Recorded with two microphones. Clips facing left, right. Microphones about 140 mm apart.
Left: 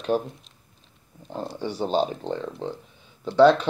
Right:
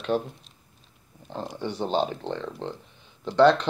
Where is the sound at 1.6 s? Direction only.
10° left (ahead or behind).